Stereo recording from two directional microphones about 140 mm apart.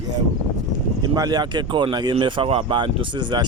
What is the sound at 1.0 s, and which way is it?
Speech, 30° right (ahead or behind).